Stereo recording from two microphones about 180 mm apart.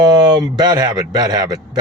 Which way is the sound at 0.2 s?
25° right (ahead or behind).